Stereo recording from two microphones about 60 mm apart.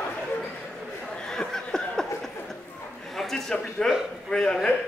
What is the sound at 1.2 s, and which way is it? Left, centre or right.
Chuckle, centre.